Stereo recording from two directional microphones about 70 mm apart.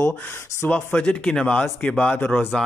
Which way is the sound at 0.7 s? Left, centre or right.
Centre.